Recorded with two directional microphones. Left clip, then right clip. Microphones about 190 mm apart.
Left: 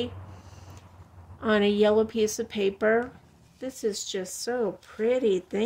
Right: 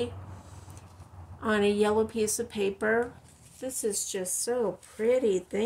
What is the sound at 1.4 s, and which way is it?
Speech, 30° left (ahead or behind).